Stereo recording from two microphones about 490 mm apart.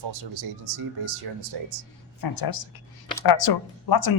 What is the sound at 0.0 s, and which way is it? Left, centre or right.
Speech, right.